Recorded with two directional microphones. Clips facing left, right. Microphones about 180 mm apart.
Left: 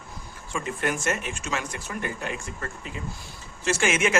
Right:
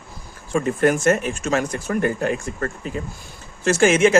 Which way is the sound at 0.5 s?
45° right (ahead or behind).